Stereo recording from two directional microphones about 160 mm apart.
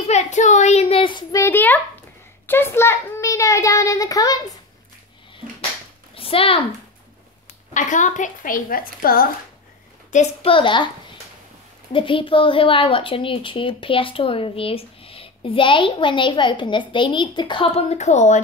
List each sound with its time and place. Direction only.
0.0 s a child's voice: 45° left (ahead or behind)
1.3 s a child's voice: 15° left (ahead or behind)
6.1 s speech: 35° left (ahead or behind)
7.7 s a woman's voice: 50° left (ahead or behind)
10.1 s a woman's voice: 35° left (ahead or behind)
11.9 s a woman's voice: 35° left (ahead or behind)